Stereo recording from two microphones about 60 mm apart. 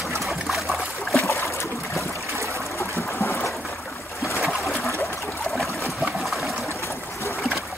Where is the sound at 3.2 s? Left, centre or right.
Left.